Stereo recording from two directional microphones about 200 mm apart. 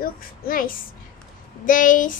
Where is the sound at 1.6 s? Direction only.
40° left (ahead or behind).